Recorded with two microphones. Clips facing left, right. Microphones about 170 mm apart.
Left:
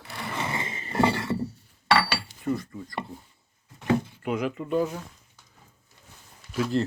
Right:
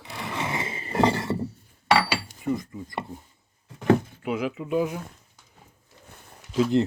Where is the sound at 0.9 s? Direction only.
20° right (ahead or behind).